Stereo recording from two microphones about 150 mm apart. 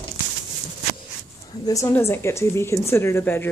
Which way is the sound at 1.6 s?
20° left (ahead or behind).